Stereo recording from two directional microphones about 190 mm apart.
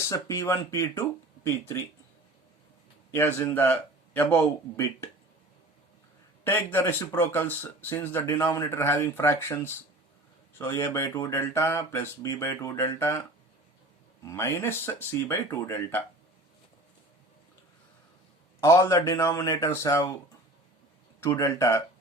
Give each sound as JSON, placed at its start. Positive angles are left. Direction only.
{"t": 0.1, "sound": "speech", "side_deg": 15}
{"t": 3.1, "sound": "a man's voice", "side_deg": 10}
{"t": 6.4, "sound": "speech", "side_deg": 10}
{"t": 14.3, "sound": "speech", "side_deg": 15}
{"t": 18.6, "sound": "speech", "side_deg": 15}
{"t": 21.2, "sound": "speech", "side_deg": 15}